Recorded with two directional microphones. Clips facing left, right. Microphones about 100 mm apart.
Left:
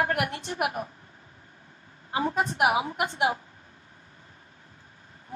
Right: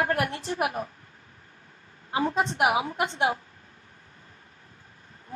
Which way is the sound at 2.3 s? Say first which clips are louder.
Left 1 dB; 25° right (ahead or behind).